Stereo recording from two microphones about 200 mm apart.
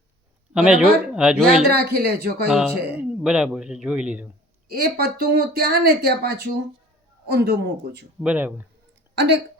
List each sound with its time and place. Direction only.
0.5 s a man's voice: 5° right (ahead or behind)
1.6 s speech: 50° right (ahead or behind)
2.5 s a man's voice: 5° right (ahead or behind)
4.7 s speech: 50° right (ahead or behind)
8.2 s speech: 5° right (ahead or behind)
9.1 s speech: 60° right (ahead or behind)